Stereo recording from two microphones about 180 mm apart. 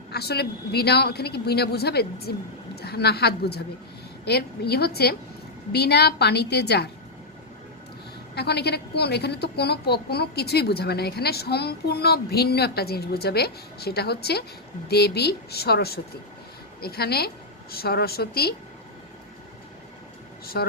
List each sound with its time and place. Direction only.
0.1 s a woman's voice: 65° left (ahead or behind)
8.4 s a woman's voice: 65° left (ahead or behind)
20.4 s speech: 60° left (ahead or behind)